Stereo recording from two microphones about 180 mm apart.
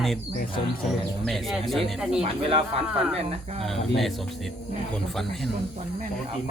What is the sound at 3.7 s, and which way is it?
Speech, centre (ahead or behind).